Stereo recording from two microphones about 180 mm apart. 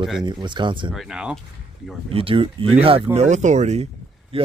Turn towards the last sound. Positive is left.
turn(degrees=-30)  # may be behind; listen again after turning